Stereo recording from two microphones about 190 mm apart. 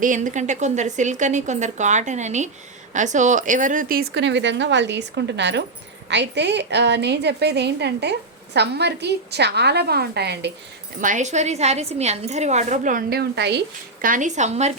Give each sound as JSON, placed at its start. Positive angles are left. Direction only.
{"t": 0.0, "sound": "a woman's voice", "side_deg": -40}
{"t": 11.0, "sound": "a woman's voice", "side_deg": -40}
{"t": 14.0, "sound": "a woman's voice", "side_deg": -45}